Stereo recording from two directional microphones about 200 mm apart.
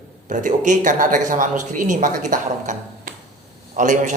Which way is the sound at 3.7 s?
40° right (ahead or behind).